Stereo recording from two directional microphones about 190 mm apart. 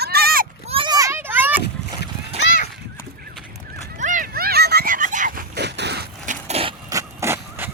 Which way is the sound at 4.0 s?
40° right (ahead or behind).